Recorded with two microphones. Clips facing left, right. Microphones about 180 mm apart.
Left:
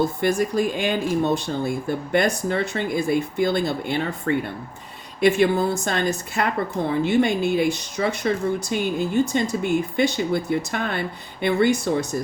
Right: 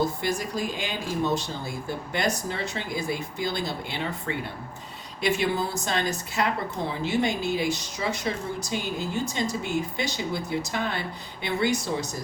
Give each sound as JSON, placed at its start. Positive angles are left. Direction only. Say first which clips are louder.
{"t": 0.0, "sound": "a woman's voice", "louder": "left 6 dB", "side_deg": 55}